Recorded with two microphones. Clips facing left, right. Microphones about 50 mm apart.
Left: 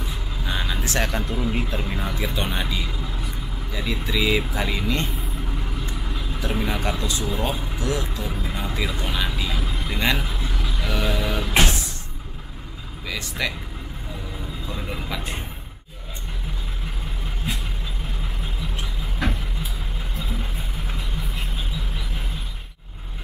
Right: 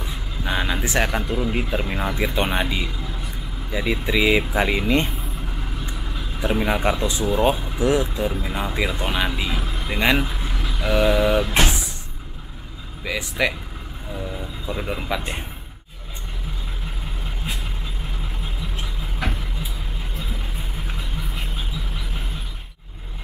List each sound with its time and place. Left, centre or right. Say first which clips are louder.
0.5 s frog: right 4 dB; right
1.5 s speech: right 2 dB; centre
6.4 s speech: right 5 dB; right
13.0 s speech: right 5 dB; centre
14.7 s speech: right 6 dB; right